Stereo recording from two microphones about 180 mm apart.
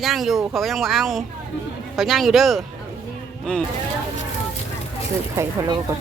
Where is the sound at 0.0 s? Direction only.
Centre (ahead or behind).